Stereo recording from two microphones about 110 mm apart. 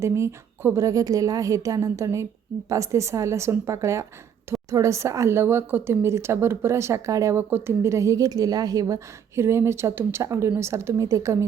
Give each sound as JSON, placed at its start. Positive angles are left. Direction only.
{"t": 0.0, "sound": "a woman's voice", "side_deg": -25}